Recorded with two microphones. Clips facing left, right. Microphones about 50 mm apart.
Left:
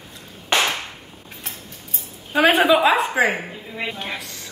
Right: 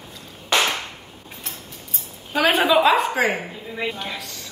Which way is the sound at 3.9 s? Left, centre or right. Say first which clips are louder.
Left 1 dB; left.